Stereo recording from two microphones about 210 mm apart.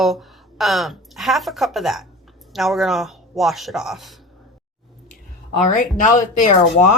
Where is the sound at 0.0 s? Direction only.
Centre (ahead or behind).